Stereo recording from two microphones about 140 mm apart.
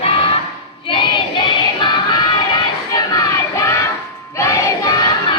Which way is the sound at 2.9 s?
25° left (ahead or behind).